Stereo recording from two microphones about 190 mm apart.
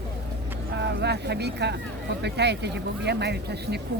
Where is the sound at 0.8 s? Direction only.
60° right (ahead or behind).